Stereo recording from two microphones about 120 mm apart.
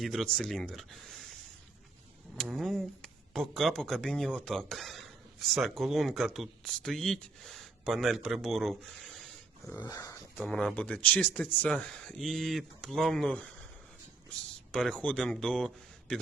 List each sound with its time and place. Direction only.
0.0 s speech: centre (ahead or behind)
2.3 s speech: centre (ahead or behind)
9.8 s speech: 30° left (ahead or behind)
10.4 s speech: 5° left (ahead or behind)
14.7 s speech: 5° left (ahead or behind)